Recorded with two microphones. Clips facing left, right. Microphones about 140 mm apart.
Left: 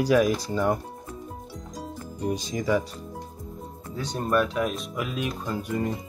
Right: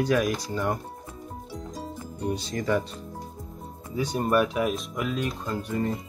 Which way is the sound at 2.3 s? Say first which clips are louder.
Left 1 dB; 10° left (ahead or behind).